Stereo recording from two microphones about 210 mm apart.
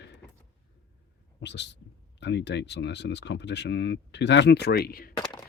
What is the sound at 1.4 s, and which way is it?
Speech, 55° left (ahead or behind).